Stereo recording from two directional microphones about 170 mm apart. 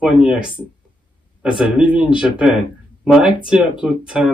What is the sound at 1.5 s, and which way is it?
A woman's voice, 5° right (ahead or behind).